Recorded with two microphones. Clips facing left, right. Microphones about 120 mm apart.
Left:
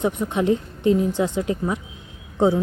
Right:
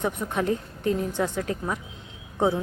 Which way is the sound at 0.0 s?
15° left (ahead or behind).